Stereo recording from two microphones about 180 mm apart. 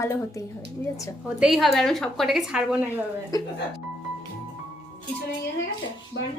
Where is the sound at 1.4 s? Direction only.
Centre (ahead or behind).